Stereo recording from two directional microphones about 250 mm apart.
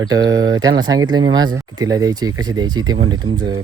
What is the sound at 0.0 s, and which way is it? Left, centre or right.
Speech, centre.